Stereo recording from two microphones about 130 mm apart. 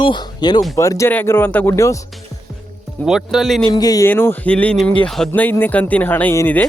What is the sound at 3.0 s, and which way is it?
Speech, 5° right (ahead or behind).